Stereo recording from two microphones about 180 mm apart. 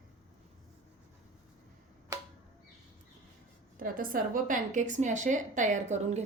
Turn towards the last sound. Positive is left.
turn(degrees=-40)  # may be behind; listen again after turning